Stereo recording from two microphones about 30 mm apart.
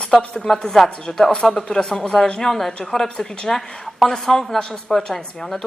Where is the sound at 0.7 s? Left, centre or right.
Centre.